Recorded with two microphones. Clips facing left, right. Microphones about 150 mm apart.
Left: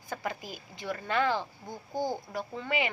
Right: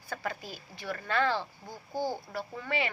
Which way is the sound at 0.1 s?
20° left (ahead or behind).